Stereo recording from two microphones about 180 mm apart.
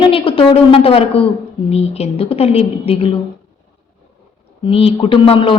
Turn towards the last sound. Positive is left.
turn(degrees=30)  # may be behind; listen again after turning